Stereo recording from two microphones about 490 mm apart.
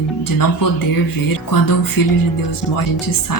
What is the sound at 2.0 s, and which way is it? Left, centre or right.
Speech, left.